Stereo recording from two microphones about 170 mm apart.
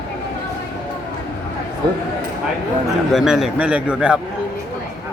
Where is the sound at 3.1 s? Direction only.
Centre (ahead or behind).